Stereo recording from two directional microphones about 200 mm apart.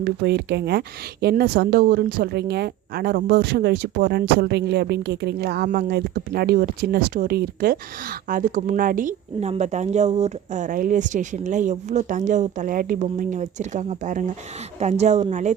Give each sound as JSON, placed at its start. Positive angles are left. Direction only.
{"t": 0.0, "sound": "speech", "side_deg": -55}